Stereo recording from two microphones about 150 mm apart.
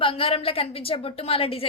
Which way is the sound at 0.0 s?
40° left (ahead or behind).